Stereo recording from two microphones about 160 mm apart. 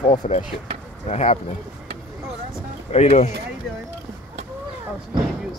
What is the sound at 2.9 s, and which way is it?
Speech, 45° left (ahead or behind).